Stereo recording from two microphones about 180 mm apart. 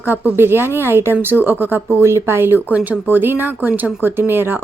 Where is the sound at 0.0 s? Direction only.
10° right (ahead or behind).